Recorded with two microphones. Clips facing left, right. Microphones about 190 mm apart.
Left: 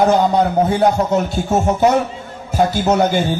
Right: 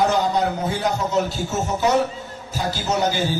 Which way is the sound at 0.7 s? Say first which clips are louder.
Left 7 dB; 55° left (ahead or behind).